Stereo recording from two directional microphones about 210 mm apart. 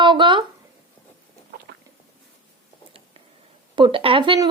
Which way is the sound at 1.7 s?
55° right (ahead or behind).